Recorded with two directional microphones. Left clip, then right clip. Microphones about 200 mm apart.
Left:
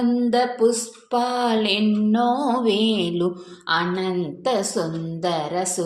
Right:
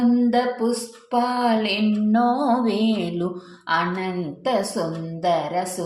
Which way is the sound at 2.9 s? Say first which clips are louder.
Left 3 dB; 25° left (ahead or behind).